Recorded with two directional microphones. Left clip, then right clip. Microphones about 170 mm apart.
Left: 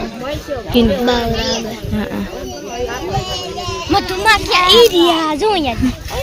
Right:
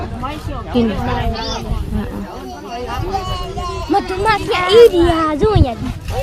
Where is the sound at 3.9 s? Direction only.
30° right (ahead or behind).